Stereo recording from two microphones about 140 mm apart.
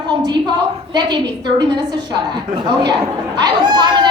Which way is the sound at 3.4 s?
30° right (ahead or behind).